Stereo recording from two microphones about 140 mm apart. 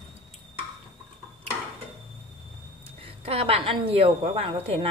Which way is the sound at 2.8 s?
45° right (ahead or behind).